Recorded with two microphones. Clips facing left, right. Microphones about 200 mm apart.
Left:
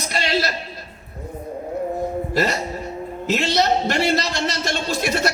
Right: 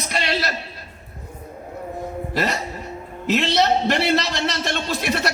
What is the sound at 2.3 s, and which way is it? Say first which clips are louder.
A man's voice: right 1 dB; 40° left (ahead or behind).